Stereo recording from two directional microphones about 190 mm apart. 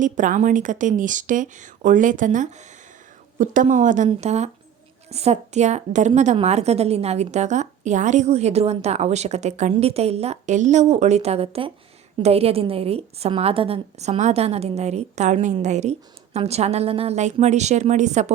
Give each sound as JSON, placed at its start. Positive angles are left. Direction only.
{"t": 0.0, "sound": "a woman's voice", "side_deg": -40}